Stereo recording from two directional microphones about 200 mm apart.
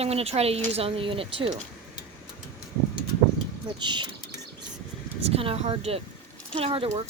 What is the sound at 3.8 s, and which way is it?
Speech, 20° right (ahead or behind).